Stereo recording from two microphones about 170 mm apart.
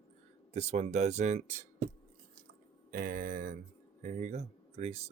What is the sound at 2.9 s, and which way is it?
Speech, 55° right (ahead or behind).